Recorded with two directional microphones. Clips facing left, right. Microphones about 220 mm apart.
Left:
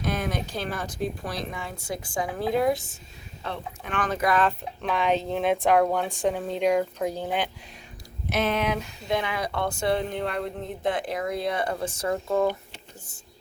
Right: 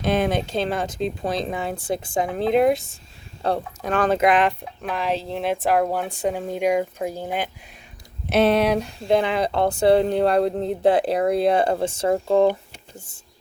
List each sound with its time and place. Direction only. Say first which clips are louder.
0.0 s a woman's voice: right 7 dB; 25° right (ahead or behind)
3.4 s speech: right 10 dB; 40° right (ahead or behind); by 4.5 s 15° right (ahead or behind)
4.8 s speech: left 1 dB; 5° right (ahead or behind)
8.3 s a woman's voice: right 8 dB; 35° right (ahead or behind)